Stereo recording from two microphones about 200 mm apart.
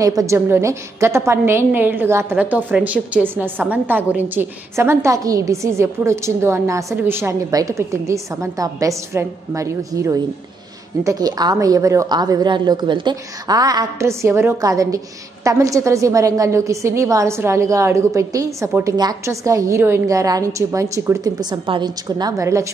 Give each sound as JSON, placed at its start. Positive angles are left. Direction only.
{"t": 0.0, "sound": "a woman's voice", "side_deg": -15}